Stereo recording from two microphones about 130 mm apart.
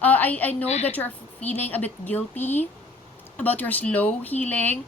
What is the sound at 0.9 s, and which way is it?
Speech, 15° left (ahead or behind).